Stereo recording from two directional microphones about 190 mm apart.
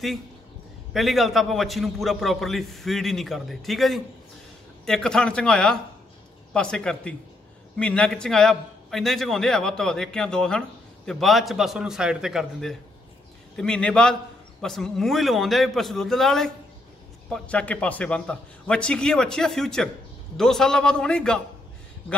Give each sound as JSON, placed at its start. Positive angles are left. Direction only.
{"t": 0.9, "sound": "a man's voice", "side_deg": 0}